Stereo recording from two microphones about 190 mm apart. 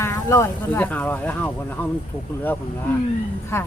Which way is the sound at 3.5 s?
15° left (ahead or behind).